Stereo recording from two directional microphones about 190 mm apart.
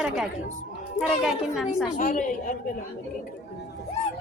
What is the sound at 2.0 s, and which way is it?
Speech, 45° left (ahead or behind).